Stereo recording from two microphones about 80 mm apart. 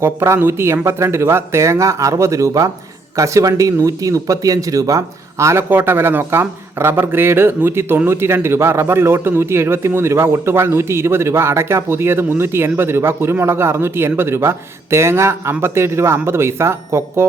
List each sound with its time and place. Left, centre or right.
0.0 s a man's voice: right
5.6 s a man's voice: right